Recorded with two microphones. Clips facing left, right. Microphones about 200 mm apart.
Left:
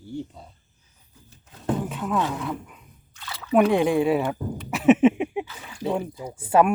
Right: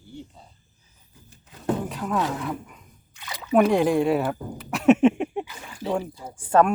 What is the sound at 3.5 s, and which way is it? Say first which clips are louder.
Speech: even; centre (ahead or behind).